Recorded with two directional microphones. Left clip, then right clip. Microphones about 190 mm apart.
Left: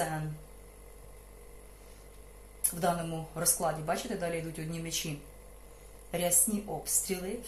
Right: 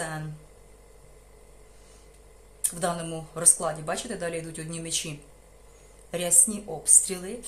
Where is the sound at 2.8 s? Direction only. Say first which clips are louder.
Right 1 dB; 30° right (ahead or behind).